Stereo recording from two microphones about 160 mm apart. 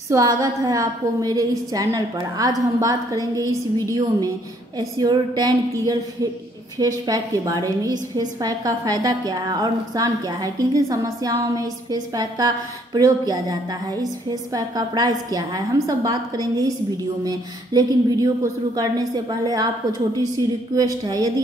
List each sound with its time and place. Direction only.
0.1 s a woman's voice: 20° right (ahead or behind)